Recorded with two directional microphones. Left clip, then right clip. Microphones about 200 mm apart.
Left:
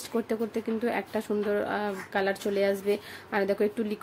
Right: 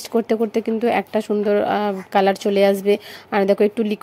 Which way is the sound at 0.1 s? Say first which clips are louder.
Right 11 dB; 35° right (ahead or behind).